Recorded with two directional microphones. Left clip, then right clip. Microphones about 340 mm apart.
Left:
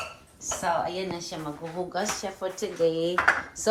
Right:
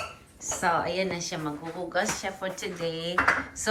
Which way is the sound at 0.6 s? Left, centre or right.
Centre.